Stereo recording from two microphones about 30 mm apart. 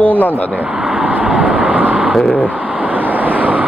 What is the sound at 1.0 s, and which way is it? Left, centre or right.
Vehicle, right.